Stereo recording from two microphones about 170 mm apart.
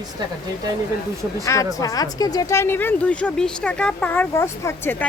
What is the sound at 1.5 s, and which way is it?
Speech, 20° left (ahead or behind).